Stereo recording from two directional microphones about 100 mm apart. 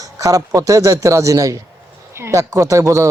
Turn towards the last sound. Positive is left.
turn(degrees=-30)  # may be behind; listen again after turning